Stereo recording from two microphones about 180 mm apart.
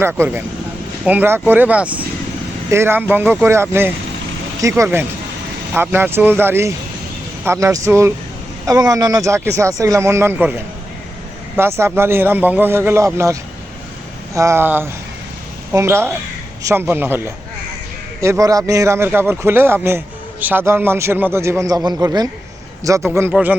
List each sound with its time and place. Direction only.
0.0 s speech: 10° right (ahead or behind)
11.5 s speech: 15° right (ahead or behind)
14.3 s speech: 15° right (ahead or behind)